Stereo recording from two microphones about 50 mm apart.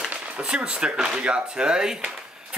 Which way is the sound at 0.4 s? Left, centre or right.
Centre.